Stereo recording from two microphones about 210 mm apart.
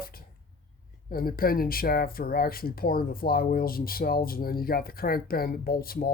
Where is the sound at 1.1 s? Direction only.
45° left (ahead or behind).